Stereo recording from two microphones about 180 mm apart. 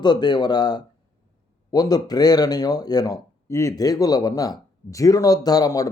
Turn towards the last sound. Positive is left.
turn(degrees=20)  # may be behind; listen again after turning